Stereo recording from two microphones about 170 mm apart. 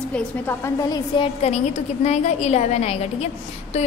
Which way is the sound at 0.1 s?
15° left (ahead or behind).